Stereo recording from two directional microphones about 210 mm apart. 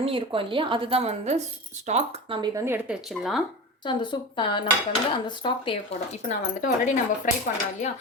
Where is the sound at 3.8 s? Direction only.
20° left (ahead or behind).